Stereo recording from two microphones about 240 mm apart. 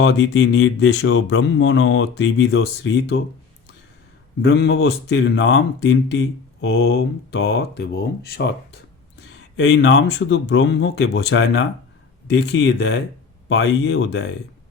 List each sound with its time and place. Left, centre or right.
0.0 s speech: left
4.4 s speech: left